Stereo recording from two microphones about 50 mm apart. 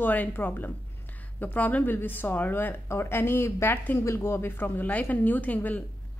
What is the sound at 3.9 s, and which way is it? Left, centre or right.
A woman's voice, left.